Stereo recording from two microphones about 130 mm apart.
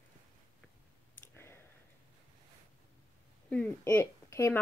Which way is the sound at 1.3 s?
20° left (ahead or behind).